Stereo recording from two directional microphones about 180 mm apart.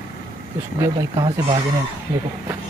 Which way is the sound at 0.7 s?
25° right (ahead or behind).